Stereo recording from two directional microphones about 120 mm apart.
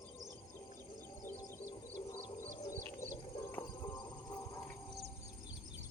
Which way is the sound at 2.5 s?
35° left (ahead or behind).